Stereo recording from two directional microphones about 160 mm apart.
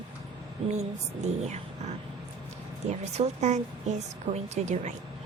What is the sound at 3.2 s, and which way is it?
Speech, 45° right (ahead or behind).